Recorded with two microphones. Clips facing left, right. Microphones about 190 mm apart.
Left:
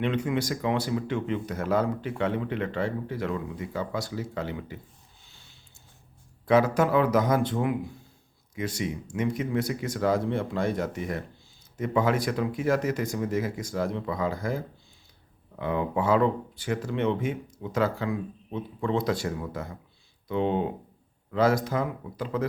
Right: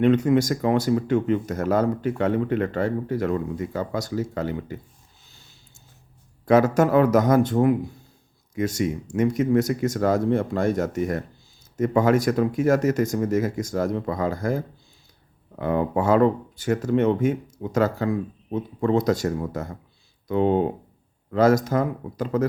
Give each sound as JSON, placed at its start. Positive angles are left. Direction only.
{"t": 0.0, "sound": "speech", "side_deg": -45}
{"t": 6.4, "sound": "speech", "side_deg": -45}